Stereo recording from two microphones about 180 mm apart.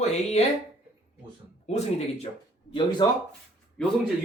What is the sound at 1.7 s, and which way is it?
Speech, 35° left (ahead or behind).